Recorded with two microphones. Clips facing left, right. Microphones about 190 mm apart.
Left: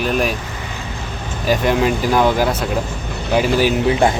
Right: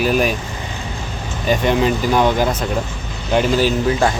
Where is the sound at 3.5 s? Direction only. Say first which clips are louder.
Left 1 dB; 15° left (ahead or behind).